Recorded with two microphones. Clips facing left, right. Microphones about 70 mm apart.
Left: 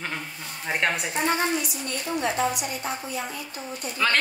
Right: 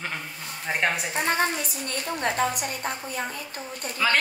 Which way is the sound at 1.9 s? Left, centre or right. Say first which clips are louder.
Even; right.